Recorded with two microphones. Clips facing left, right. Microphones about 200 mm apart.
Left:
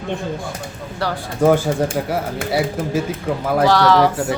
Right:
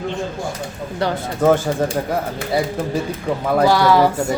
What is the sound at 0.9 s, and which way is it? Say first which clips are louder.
Speech: right 3 dB; 20° right (ahead or behind).